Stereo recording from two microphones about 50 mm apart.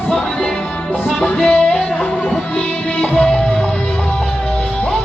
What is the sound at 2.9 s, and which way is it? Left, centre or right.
Music, left.